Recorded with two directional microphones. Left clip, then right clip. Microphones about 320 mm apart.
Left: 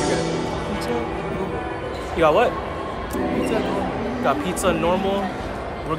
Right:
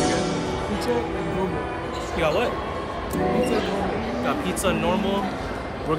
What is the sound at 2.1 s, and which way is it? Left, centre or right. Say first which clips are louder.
Speech: left 6 dB; centre.